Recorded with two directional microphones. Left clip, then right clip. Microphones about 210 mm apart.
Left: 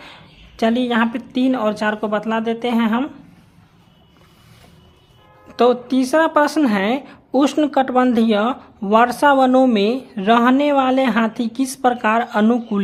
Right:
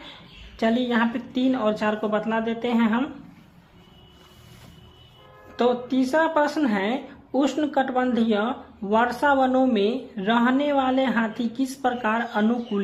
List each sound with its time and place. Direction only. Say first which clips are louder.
0.5 s a woman's voice: left 5 dB; 35° left (ahead or behind)
5.5 s a woman's voice: left 7 dB; 40° left (ahead or behind)